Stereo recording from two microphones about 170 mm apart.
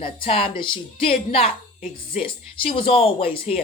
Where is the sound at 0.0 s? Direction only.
30° left (ahead or behind).